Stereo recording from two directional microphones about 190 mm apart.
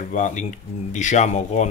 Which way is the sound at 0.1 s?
40° left (ahead or behind).